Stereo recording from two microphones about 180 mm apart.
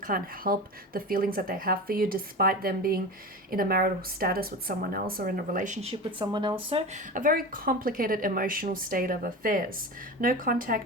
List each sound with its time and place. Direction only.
0.0 s speech: 55° right (ahead or behind); by 6.0 s 35° right (ahead or behind)
6.1 s speech: 25° right (ahead or behind); by 10.8 s 50° right (ahead or behind)